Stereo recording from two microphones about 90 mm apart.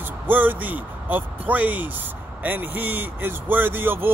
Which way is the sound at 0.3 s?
20° right (ahead or behind).